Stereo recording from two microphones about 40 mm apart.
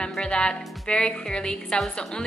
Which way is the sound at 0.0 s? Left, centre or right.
Left.